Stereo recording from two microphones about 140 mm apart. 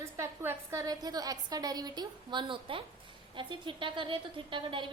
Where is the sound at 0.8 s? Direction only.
30° right (ahead or behind).